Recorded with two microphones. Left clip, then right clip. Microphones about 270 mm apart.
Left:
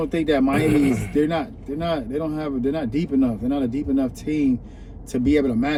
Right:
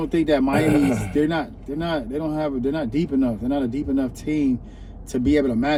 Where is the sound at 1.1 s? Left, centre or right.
Centre.